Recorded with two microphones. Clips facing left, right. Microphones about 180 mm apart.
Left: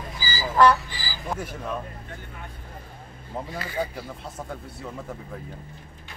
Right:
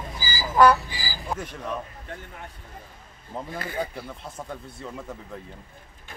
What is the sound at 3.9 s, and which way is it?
Speech, 5° left (ahead or behind).